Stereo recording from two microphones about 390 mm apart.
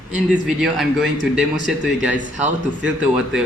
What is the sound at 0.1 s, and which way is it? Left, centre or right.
Speech, centre.